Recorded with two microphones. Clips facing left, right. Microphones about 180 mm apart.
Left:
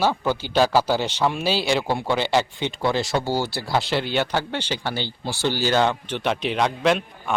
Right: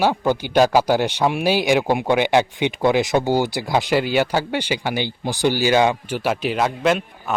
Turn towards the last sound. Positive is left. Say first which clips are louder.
# right 1 dB
turn(degrees=0)  # may be behind; listen again after turning